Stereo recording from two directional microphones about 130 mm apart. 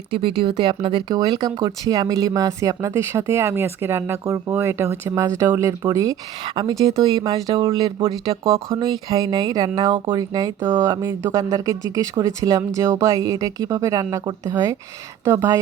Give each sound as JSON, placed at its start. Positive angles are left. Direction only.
{"t": 0.1, "sound": "speech", "side_deg": -40}
{"t": 8.7, "sound": "speech", "side_deg": -30}